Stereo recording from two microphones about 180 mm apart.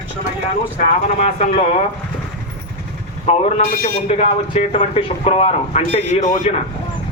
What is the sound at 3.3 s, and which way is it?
Speech, 35° left (ahead or behind).